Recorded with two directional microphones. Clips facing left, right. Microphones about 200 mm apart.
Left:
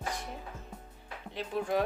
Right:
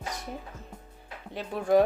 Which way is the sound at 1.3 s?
45° right (ahead or behind).